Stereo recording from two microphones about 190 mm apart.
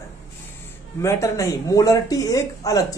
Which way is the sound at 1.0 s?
15° left (ahead or behind).